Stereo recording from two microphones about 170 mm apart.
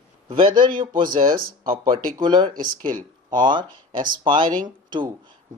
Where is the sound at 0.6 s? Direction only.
30° right (ahead or behind).